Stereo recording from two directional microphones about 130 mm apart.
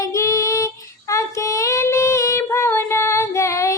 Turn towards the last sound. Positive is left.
turn(degrees=25)  # may be behind; listen again after turning